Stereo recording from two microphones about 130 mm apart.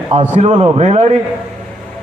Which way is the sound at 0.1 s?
55° right (ahead or behind).